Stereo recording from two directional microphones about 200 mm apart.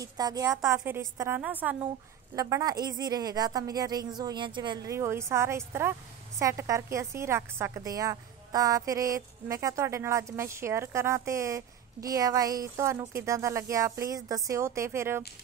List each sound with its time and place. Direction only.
0.0 s a woman's voice: 20° right (ahead or behind)